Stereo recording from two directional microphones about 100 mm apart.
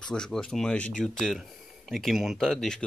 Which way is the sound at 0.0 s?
5° left (ahead or behind).